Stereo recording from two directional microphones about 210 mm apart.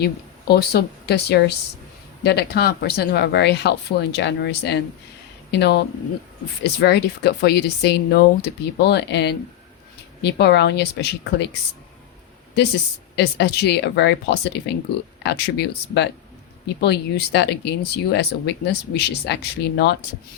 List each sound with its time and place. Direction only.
0.0 s speech: 50° left (ahead or behind)
13.1 s speech: 55° left (ahead or behind)